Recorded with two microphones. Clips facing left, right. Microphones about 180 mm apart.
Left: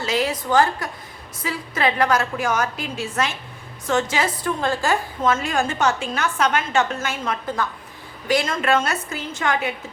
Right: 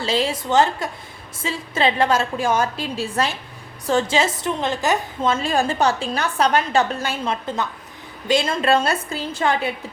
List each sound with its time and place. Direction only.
0.0 s a woman's voice: 30° right (ahead or behind)